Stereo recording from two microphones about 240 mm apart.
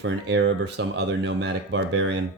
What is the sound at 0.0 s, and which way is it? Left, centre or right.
Speech, right.